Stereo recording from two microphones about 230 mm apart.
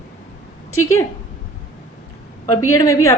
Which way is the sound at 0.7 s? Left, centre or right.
Left.